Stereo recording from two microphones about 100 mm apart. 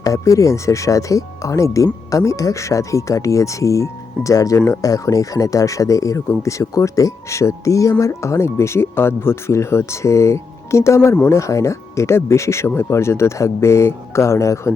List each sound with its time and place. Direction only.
0.0 s speech: 35° left (ahead or behind)